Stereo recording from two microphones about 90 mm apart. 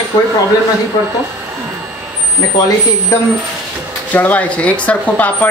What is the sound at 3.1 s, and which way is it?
Speech, 30° left (ahead or behind).